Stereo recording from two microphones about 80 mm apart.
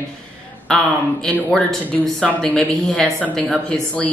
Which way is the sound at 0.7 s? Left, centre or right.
Centre.